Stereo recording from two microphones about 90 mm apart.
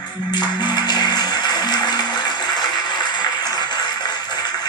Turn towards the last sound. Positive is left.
turn(degrees=50)  # may be behind; listen again after turning